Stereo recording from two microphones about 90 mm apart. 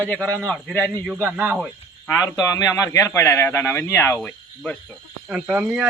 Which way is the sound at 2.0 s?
40° left (ahead or behind).